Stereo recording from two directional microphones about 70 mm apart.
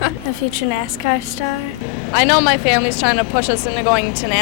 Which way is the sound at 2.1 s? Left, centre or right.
Centre.